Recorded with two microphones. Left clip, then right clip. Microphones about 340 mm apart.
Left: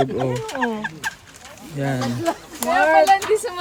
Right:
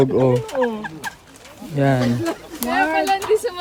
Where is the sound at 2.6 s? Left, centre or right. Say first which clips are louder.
Left 4 dB; centre.